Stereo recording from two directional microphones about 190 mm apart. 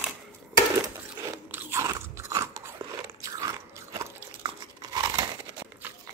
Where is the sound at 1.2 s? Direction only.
15° right (ahead or behind).